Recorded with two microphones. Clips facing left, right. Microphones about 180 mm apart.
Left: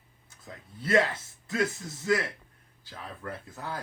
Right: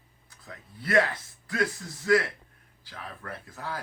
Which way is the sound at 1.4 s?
20° left (ahead or behind).